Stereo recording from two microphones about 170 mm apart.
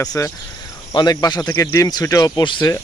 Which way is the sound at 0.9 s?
20° left (ahead or behind).